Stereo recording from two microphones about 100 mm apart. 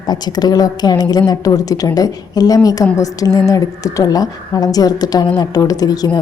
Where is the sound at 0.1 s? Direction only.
40° left (ahead or behind).